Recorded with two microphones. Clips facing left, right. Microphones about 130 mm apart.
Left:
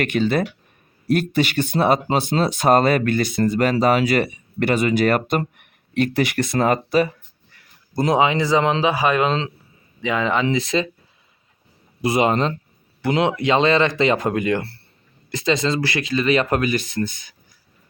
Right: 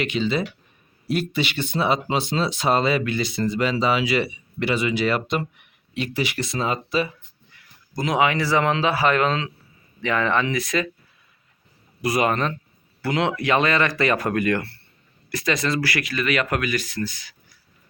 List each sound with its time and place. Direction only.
0.0 s speech: 50° left (ahead or behind)
7.9 s speech: 30° left (ahead or behind)
12.0 s speech: 25° left (ahead or behind)